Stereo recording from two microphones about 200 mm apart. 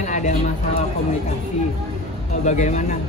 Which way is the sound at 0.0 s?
35° left (ahead or behind).